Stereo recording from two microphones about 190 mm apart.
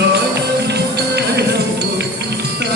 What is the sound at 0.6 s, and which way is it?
Music, 60° right (ahead or behind).